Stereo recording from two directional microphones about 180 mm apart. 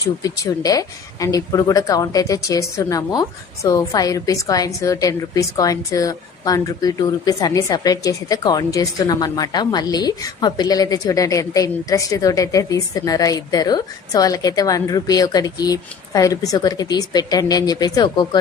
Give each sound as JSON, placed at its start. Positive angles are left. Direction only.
{"t": 0.2, "sound": "a woman's voice", "side_deg": 20}